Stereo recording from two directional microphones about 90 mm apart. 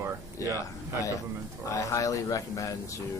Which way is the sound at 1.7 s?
40° left (ahead or behind).